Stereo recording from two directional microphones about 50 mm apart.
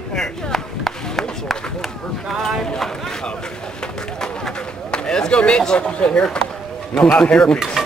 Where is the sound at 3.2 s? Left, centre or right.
Centre.